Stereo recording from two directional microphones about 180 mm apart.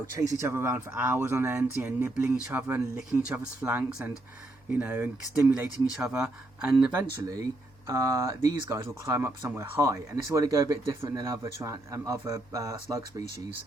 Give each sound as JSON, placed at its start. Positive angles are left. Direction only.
{"t": 0.2, "sound": "speech", "side_deg": -15}
{"t": 6.9, "sound": "speech", "side_deg": -20}